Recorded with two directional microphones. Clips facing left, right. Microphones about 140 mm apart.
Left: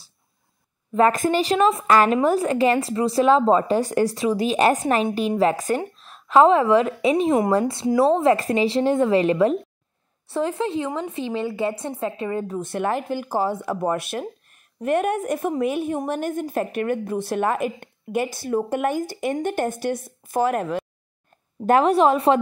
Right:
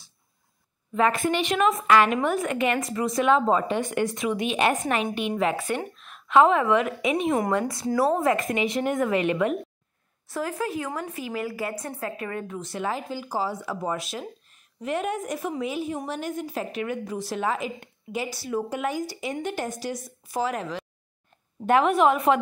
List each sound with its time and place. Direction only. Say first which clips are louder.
0.9 s a woman's voice: left 5 dB; 40° left (ahead or behind)
12.5 s a woman's voice: left 4 dB; 55° left (ahead or behind)
21.6 s a woman's voice: left 3 dB; 40° left (ahead or behind)